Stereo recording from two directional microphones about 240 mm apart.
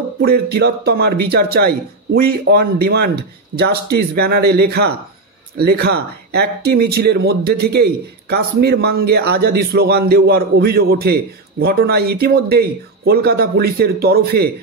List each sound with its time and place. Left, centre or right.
0.2 s speech: right